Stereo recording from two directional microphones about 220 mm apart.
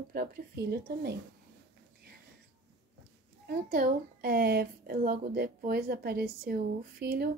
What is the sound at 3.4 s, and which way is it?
Speech, 40° right (ahead or behind).